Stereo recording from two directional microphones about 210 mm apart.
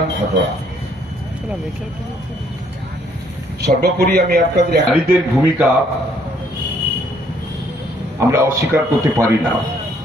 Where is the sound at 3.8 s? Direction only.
50° right (ahead or behind).